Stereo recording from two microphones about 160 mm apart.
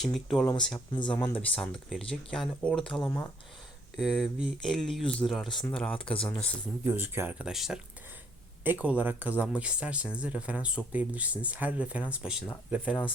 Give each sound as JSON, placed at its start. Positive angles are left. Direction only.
{"t": 0.0, "sound": "speech", "side_deg": 5}
{"t": 0.9, "sound": "speech", "side_deg": 30}
{"t": 1.2, "sound": "speech", "side_deg": 10}
{"t": 3.0, "sound": "speech", "side_deg": 20}
{"t": 3.9, "sound": "speech", "side_deg": 0}
{"t": 6.8, "sound": "speech", "side_deg": -15}